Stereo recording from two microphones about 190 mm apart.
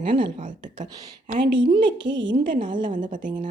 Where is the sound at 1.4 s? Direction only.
25° right (ahead or behind).